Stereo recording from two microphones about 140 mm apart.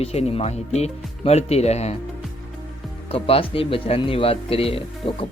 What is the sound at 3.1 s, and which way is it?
Speech, 45° left (ahead or behind).